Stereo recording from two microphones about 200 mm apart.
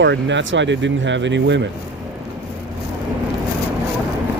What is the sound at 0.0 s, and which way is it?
Speech, 65° right (ahead or behind).